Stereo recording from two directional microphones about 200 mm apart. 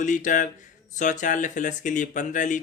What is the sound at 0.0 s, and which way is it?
Speech, 40° left (ahead or behind).